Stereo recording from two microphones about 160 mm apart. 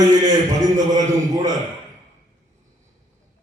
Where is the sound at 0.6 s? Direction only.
25° right (ahead or behind).